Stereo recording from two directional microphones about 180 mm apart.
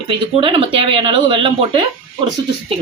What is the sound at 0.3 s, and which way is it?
Speech, 30° right (ahead or behind).